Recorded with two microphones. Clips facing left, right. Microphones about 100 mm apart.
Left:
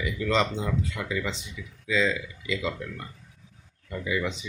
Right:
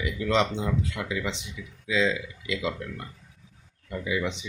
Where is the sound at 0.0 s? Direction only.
15° right (ahead or behind).